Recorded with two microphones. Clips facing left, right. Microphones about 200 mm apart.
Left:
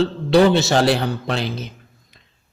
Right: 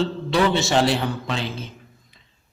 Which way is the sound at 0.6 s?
40° left (ahead or behind).